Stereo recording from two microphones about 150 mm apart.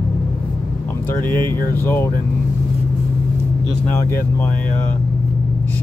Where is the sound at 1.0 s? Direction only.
10° left (ahead or behind).